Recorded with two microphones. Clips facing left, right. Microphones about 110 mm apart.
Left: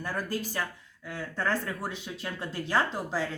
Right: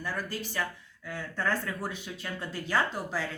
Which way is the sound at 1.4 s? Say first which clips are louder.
Left 1 dB; 30° left (ahead or behind).